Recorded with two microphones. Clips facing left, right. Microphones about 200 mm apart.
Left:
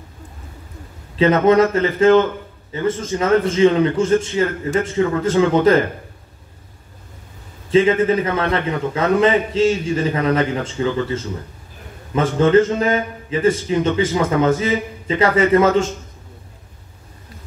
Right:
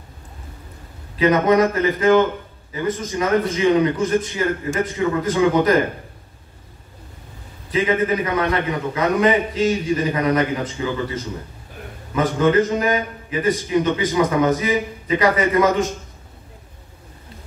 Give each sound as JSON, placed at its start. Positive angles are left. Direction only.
{"t": 1.1, "sound": "a man's voice", "side_deg": 25}
{"t": 7.7, "sound": "a man's voice", "side_deg": 25}